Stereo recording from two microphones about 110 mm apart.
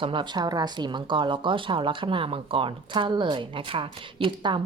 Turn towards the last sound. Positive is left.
turn(degrees=-50)  # may be behind; listen again after turning